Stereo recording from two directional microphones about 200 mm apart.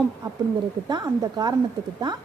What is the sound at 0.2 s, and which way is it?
A woman's voice, 20° right (ahead or behind).